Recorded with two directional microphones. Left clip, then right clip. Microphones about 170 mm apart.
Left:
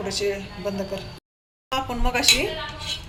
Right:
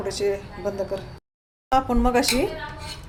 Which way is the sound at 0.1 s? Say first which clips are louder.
Right 1 dB; 70° right (ahead or behind).